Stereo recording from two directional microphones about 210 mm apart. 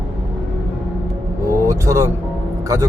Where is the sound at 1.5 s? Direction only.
15° right (ahead or behind).